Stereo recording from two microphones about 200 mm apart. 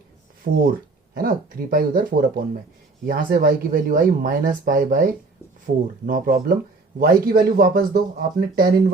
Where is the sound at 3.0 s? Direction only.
45° right (ahead or behind).